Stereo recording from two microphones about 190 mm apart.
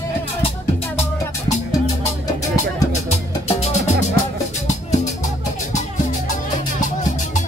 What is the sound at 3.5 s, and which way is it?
Music, 35° left (ahead or behind).